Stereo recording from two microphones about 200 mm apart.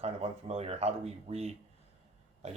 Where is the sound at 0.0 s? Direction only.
30° right (ahead or behind).